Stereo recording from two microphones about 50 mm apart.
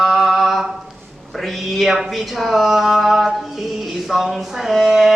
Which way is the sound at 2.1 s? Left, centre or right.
Centre.